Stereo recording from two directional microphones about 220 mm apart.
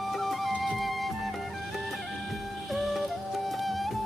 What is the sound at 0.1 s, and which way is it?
Music, centre (ahead or behind).